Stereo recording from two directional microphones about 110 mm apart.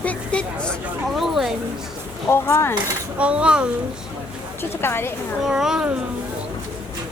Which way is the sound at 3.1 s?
10° right (ahead or behind).